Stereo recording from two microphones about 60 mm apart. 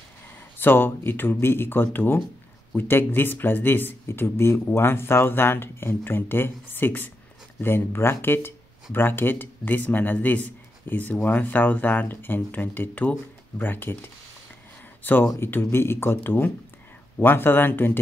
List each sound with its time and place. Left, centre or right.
0.6 s speech: left
15.3 s speech: left